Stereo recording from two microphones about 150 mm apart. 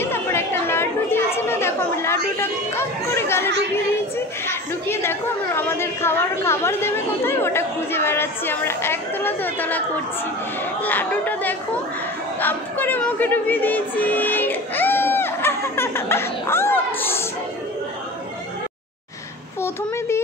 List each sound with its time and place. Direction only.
0.0 s chatter: 15° left (ahead or behind)
4.5 s a woman's voice: 15° left (ahead or behind)